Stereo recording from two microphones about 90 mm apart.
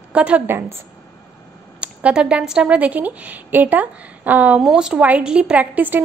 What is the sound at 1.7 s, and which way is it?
A woman's voice, 10° right (ahead or behind).